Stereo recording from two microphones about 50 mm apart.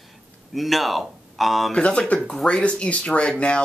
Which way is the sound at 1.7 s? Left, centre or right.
Left.